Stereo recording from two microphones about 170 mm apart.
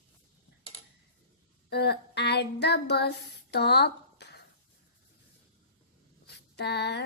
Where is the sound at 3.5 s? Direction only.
75° left (ahead or behind).